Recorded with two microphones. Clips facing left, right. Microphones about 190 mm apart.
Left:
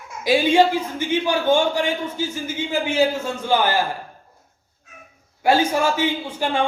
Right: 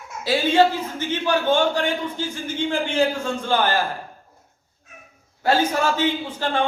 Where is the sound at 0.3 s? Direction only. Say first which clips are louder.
Left 2 dB; 10° left (ahead or behind).